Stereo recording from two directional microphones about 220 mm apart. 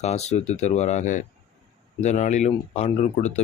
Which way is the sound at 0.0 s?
30° left (ahead or behind).